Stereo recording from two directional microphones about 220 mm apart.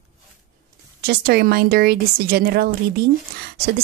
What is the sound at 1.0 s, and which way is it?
Speech, 45° right (ahead or behind).